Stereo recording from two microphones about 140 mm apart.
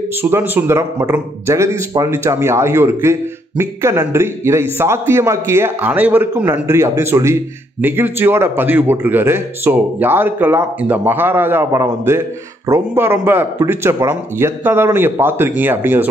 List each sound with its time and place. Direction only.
0.2 s a man's voice: 15° right (ahead or behind)